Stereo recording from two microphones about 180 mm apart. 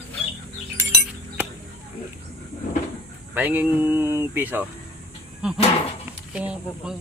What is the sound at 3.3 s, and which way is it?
Speech, 10° right (ahead or behind).